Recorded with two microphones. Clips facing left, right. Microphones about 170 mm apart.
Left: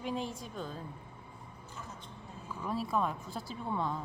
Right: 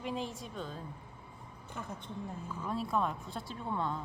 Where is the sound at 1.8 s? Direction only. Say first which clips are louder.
Right 5 dB; 60° right (ahead or behind).